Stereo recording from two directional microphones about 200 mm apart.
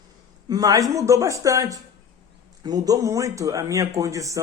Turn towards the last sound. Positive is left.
turn(degrees=-15)  # may be behind; listen again after turning